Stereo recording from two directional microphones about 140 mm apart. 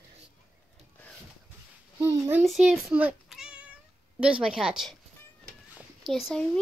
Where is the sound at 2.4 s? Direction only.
5° right (ahead or behind).